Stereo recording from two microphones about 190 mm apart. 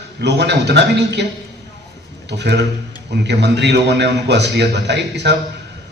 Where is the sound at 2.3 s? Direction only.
65° right (ahead or behind).